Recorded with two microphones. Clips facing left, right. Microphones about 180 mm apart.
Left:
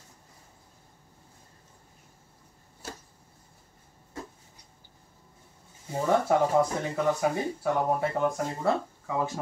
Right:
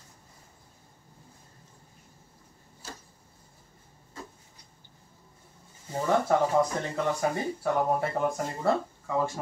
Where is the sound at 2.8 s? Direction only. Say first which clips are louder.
Left 3 dB; 65° left (ahead or behind).